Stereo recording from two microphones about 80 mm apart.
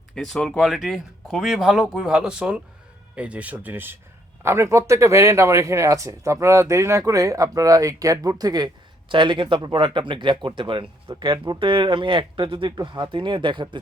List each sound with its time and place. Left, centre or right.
0.1 s speech: centre; by 3.9 s right
4.4 s speech: right